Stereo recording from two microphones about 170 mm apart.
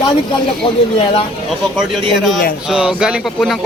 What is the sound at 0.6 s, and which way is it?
Speech, 35° left (ahead or behind).